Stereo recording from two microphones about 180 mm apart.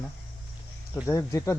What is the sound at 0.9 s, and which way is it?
Speech, 15° left (ahead or behind).